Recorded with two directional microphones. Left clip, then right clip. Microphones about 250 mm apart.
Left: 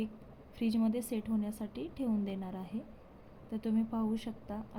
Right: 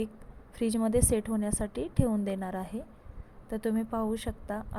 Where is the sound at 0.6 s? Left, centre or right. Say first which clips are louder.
Right 7 dB; right.